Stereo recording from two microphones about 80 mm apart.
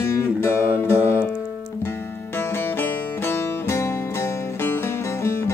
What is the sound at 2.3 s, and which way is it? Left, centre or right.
Music, left.